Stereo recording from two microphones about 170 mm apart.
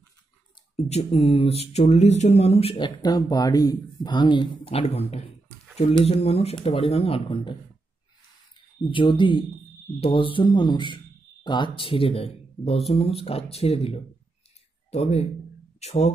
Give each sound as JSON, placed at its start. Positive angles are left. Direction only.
{"t": 0.7, "sound": "speech", "side_deg": 40}
{"t": 3.0, "sound": "speech", "side_deg": 20}
{"t": 8.9, "sound": "speech", "side_deg": 30}